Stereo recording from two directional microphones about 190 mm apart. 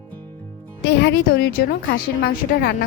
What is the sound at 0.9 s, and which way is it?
A woman's voice, 65° left (ahead or behind).